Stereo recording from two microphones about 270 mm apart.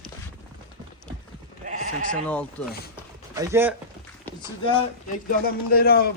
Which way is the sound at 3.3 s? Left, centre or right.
Centre.